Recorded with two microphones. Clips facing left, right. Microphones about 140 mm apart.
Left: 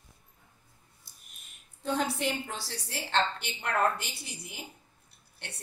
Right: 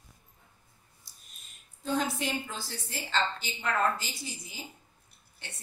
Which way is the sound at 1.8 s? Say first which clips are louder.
Even; 70° left (ahead or behind).